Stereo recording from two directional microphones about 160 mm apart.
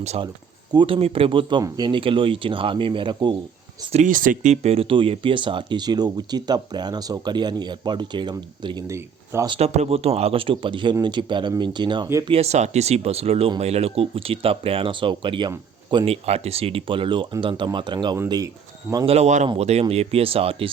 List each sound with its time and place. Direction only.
0.0 s a man's voice: 45° right (ahead or behind)
0.7 s speech: 30° right (ahead or behind)
3.9 s speech: 55° right (ahead or behind)
4.6 s speech: 35° right (ahead or behind)
9.5 s speech: 40° right (ahead or behind)
12.3 s speech: 40° right (ahead or behind)
16.2 s speech: 40° right (ahead or behind)
19.0 s a man's voice: 40° right (ahead or behind)